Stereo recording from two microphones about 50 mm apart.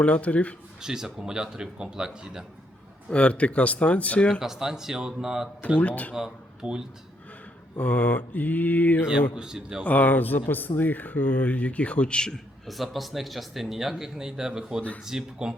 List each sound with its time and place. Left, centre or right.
0.0 s speech: left
0.8 s speech: centre
3.1 s speech: left
4.4 s speech: centre
5.6 s speech: left
6.1 s speech: centre
7.8 s speech: left
9.3 s speech: centre
9.8 s speech: left
12.6 s speech: centre